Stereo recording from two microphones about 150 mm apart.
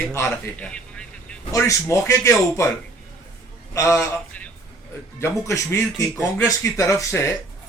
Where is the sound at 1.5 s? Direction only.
20° left (ahead or behind).